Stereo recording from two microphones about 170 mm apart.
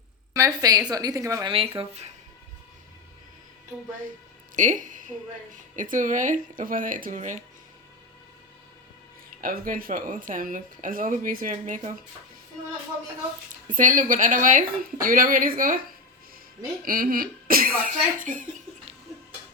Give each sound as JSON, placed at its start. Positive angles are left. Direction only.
{"t": 0.3, "sound": "a woman's voice", "side_deg": -20}
{"t": 1.5, "sound": "speech", "side_deg": -35}
{"t": 4.5, "sound": "a woman's voice", "side_deg": -50}
{"t": 9.4, "sound": "speech", "side_deg": -55}
{"t": 13.5, "sound": "speech", "side_deg": -50}
{"t": 16.8, "sound": "speech", "side_deg": -55}